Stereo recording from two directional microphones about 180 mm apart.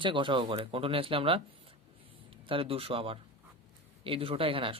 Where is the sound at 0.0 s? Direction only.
25° right (ahead or behind).